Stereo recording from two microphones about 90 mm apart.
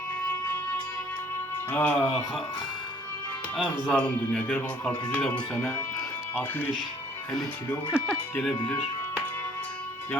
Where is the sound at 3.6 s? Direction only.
15° left (ahead or behind).